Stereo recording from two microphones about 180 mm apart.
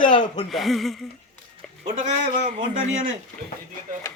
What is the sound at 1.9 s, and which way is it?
A man's voice, 40° right (ahead or behind).